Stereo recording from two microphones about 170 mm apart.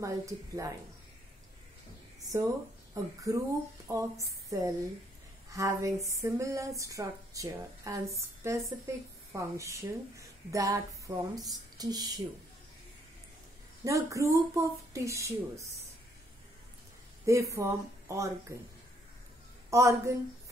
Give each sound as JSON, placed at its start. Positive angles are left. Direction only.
{"t": 0.0, "sound": "speech", "side_deg": -20}
{"t": 2.2, "sound": "a woman's voice", "side_deg": -20}
{"t": 13.8, "sound": "a woman's voice", "side_deg": -20}
{"t": 17.3, "sound": "a woman's voice", "side_deg": -15}
{"t": 19.7, "sound": "a woman's voice", "side_deg": -20}